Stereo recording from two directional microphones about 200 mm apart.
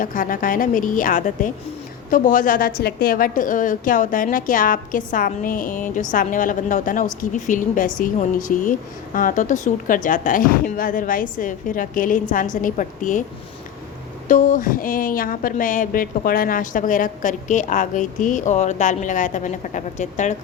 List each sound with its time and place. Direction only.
0.0 s a woman's voice: 40° left (ahead or behind)
14.3 s speech: 40° left (ahead or behind)